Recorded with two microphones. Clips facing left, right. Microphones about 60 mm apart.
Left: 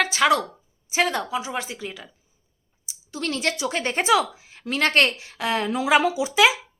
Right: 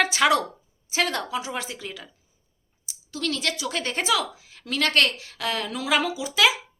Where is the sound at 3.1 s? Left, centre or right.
Left.